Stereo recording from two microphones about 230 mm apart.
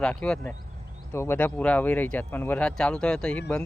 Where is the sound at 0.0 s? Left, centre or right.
Centre.